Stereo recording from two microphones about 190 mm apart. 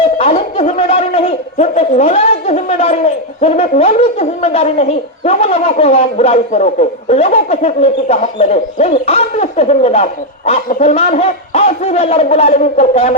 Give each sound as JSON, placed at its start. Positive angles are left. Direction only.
{"t": 0.0, "sound": "speech", "side_deg": 30}